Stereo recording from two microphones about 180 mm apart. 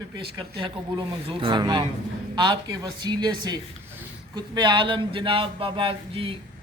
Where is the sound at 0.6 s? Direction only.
30° right (ahead or behind).